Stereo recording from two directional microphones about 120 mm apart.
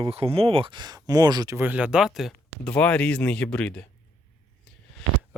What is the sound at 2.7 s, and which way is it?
Speech, 10° left (ahead or behind).